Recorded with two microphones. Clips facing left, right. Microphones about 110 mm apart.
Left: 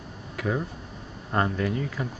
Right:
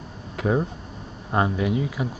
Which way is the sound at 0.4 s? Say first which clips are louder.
Right 5 dB; 30° right (ahead or behind).